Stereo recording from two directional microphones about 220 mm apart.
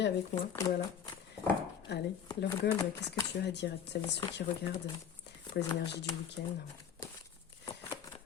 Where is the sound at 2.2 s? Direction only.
15° left (ahead or behind).